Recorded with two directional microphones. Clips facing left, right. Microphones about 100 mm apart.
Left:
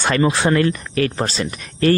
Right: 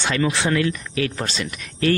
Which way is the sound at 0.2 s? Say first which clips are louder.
Left 4 dB; 40° left (ahead or behind).